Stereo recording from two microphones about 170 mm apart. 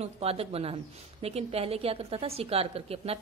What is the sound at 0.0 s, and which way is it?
A woman's voice, 35° right (ahead or behind).